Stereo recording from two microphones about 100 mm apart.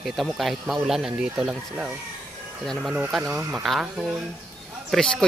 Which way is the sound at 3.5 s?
5° right (ahead or behind).